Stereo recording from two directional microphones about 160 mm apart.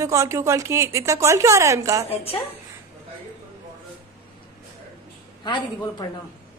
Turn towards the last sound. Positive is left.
turn(degrees=30)  # may be behind; listen again after turning